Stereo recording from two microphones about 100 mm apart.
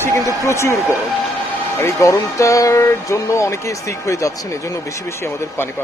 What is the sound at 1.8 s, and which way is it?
Speech, 30° left (ahead or behind).